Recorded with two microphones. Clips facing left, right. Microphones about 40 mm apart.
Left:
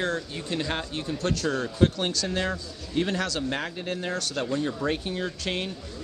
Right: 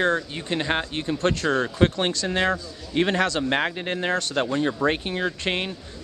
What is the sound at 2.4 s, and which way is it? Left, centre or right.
Speech, right.